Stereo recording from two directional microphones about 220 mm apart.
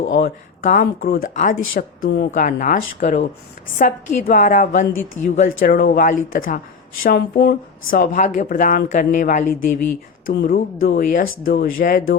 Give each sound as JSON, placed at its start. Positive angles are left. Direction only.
{"t": 0.2, "sound": "speech", "side_deg": 40}